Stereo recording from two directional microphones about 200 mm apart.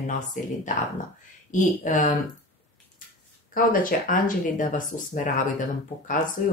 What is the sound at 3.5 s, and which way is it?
Speech, 45° left (ahead or behind).